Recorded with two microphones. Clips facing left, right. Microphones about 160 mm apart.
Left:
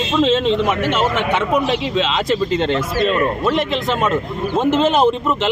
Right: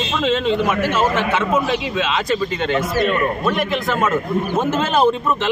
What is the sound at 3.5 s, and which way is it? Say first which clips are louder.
Speech: left 2 dB; 25° left (ahead or behind).